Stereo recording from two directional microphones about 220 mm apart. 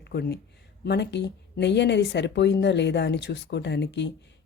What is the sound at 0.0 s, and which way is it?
Speech, 50° left (ahead or behind).